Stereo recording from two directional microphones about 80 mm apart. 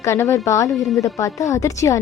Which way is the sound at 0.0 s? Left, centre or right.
Left.